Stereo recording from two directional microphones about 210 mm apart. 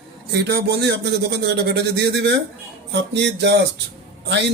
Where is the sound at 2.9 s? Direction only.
55° right (ahead or behind).